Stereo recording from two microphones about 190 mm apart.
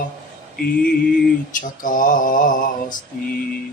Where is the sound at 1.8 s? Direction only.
45° left (ahead or behind).